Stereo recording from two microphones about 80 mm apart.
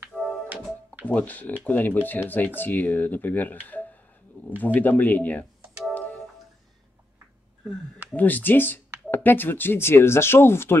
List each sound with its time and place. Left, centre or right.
1.0 s speech: centre
8.1 s speech: left